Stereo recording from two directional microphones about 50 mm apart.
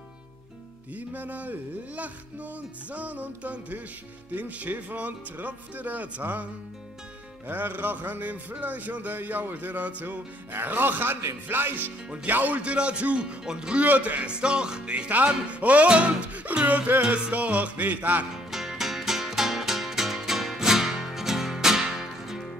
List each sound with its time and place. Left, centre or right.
0.9 s a man's voice: right
10.0 s a man's voice: right; by 13.8 s centre
13.8 s a man's voice: right
14.3 s a man's voice: centre
15.0 s a man's voice: right
18.3 s music: centre